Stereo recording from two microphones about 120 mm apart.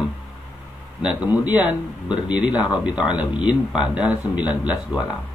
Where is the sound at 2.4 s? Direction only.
35° left (ahead or behind).